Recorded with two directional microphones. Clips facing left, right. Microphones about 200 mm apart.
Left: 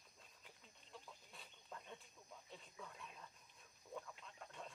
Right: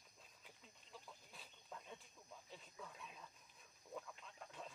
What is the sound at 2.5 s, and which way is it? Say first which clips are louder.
Dog: even; centre (ahead or behind).